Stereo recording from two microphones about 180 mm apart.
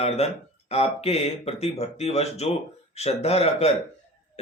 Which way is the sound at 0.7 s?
35° left (ahead or behind).